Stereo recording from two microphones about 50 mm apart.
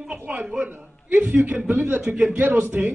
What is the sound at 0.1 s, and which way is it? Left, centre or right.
A man's voice, right.